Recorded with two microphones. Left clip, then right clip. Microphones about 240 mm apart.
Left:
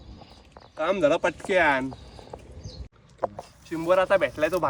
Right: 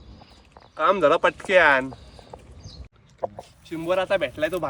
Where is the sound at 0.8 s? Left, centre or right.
Right.